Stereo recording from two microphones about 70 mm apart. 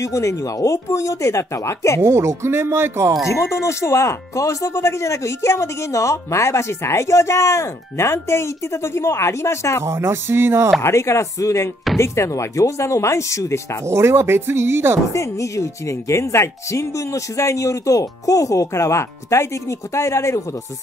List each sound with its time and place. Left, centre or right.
0.0 s speech: left
2.0 s speech: right
3.3 s speech: left
9.8 s speech: right
10.8 s speech: left
13.8 s speech: right
15.1 s speech: left